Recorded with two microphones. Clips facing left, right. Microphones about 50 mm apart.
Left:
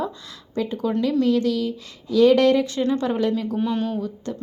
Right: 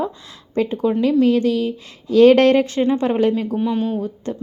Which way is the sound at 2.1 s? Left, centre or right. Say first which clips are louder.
Right 4 dB; right.